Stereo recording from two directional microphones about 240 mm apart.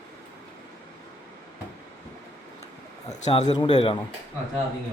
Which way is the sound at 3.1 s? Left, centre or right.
Left.